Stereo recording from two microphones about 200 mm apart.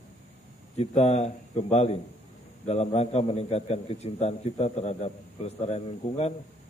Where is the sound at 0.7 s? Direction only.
30° left (ahead or behind).